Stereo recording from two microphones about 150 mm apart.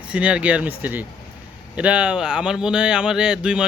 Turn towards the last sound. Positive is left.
turn(degrees=-5)  # may be behind; listen again after turning